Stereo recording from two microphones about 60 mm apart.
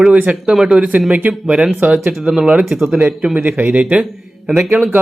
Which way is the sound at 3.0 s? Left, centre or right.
Right.